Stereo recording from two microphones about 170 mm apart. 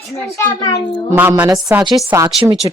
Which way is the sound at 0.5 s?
20° left (ahead or behind).